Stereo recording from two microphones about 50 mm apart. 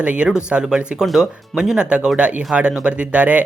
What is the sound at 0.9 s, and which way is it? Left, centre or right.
Speech, centre.